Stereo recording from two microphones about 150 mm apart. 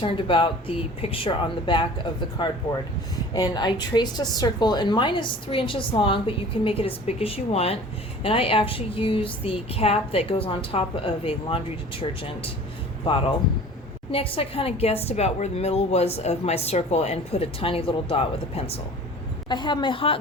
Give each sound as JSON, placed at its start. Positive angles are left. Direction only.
{"t": 0.0, "sound": "a woman's voice", "side_deg": 35}
{"t": 14.1, "sound": "a woman's voice", "side_deg": 40}
{"t": 19.5, "sound": "a woman's voice", "side_deg": 30}